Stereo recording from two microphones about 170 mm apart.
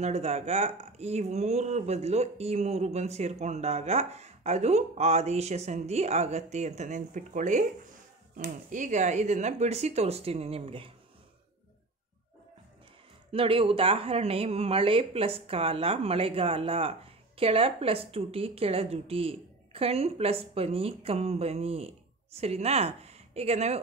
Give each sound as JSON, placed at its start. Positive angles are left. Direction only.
{"t": 0.0, "sound": "speech", "side_deg": -40}
{"t": 13.3, "sound": "speech", "side_deg": -30}